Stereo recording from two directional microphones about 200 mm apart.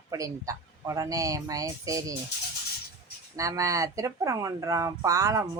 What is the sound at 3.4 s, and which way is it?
Speech, 15° right (ahead or behind).